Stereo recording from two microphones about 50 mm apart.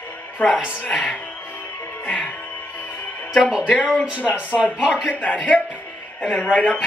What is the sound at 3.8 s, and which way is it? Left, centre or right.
Speech, centre.